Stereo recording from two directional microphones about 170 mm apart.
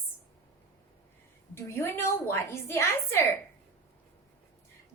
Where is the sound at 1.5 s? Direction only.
15° left (ahead or behind).